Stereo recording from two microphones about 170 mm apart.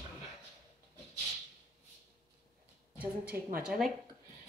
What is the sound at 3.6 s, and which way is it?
Speech, centre (ahead or behind).